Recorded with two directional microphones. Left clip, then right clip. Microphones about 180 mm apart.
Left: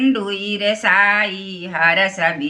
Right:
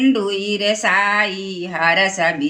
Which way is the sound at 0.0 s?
15° left (ahead or behind).